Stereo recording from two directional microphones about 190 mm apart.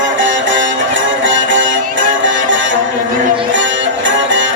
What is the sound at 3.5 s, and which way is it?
Music, 75° right (ahead or behind).